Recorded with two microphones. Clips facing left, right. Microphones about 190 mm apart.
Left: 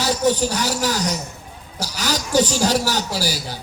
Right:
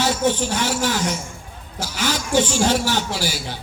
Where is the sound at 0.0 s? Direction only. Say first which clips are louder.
Left 1 dB; 40° left (ahead or behind).